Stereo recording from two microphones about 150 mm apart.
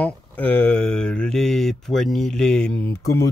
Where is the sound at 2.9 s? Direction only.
20° left (ahead or behind).